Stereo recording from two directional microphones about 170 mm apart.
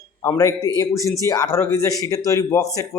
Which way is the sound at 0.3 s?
20° left (ahead or behind).